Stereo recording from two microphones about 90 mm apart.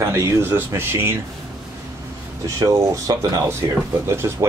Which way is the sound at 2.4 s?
40° right (ahead or behind).